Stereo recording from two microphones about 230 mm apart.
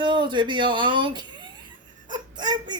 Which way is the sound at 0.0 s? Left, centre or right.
Right.